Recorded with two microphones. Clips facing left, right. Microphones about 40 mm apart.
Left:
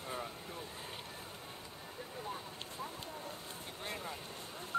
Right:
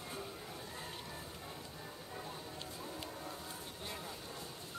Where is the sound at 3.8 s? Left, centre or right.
Left.